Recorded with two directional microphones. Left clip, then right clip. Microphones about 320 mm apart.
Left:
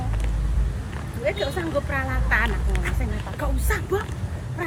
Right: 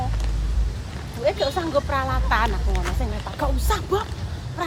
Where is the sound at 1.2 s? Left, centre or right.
Centre.